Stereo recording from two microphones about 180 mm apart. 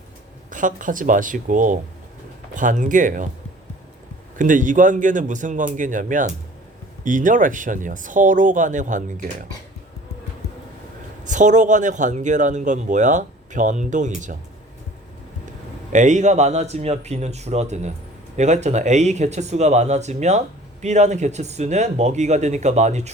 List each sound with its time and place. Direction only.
0.5 s a man's voice: 45° right (ahead or behind)
4.4 s a man's voice: 45° right (ahead or behind)
11.2 s a man's voice: 45° right (ahead or behind)
15.9 s speech: 40° right (ahead or behind)